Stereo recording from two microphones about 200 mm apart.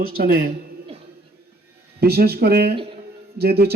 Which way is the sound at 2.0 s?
50° right (ahead or behind).